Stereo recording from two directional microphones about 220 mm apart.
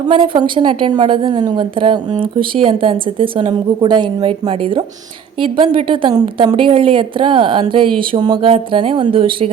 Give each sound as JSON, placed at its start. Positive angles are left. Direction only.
{"t": 0.1, "sound": "a woman's voice", "side_deg": -20}